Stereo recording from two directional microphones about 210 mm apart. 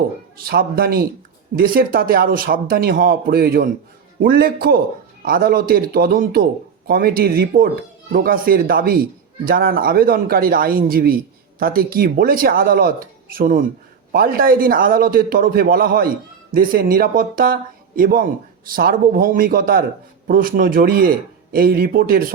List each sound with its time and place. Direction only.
0.4 s speech: 45° right (ahead or behind)